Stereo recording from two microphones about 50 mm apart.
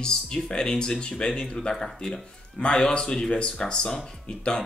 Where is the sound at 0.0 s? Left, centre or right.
Centre.